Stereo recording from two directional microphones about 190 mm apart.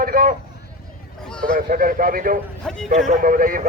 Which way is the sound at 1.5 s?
45° right (ahead or behind).